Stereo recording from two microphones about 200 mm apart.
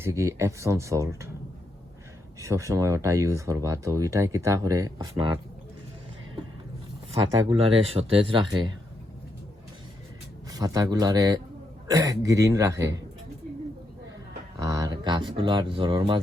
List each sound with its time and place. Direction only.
0.0 s speech: 15° right (ahead or behind)
2.4 s speech: 15° right (ahead or behind)
7.5 s speech: 30° right (ahead or behind)
10.5 s speech: 15° right (ahead or behind)
14.6 s speech: 15° right (ahead or behind)